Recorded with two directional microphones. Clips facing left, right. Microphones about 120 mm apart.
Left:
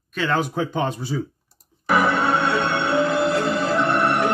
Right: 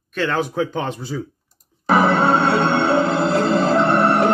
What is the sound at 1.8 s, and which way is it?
Music, 30° right (ahead or behind).